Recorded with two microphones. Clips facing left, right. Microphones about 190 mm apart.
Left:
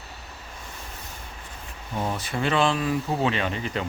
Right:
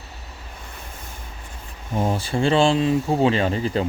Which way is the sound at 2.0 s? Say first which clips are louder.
Right 6 dB; 30° right (ahead or behind).